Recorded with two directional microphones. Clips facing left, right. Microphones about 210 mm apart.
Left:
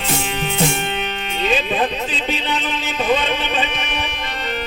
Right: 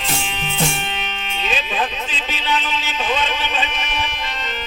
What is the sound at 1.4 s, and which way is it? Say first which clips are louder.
Music: left 5 dB; 60° left (ahead or behind).